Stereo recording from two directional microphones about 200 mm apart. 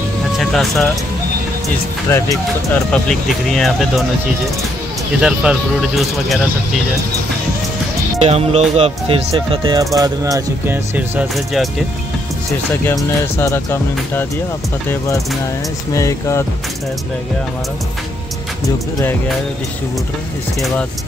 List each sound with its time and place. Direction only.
0.4 s speech: centre (ahead or behind)
2.0 s speech: 15° left (ahead or behind)
3.1 s speech: centre (ahead or behind)
5.2 s speech: 5° right (ahead or behind)
8.2 s speech: 30° right (ahead or behind); by 11.1 s 15° right (ahead or behind)
11.3 s speech: centre (ahead or behind)
13.4 s speech: 10° left (ahead or behind)
15.9 s speech: 15° left (ahead or behind)